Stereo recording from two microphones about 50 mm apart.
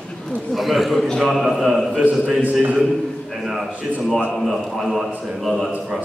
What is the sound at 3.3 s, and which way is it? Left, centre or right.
A man's voice, centre.